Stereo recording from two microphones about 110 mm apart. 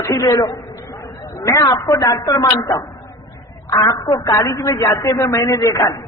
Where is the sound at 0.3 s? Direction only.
30° left (ahead or behind).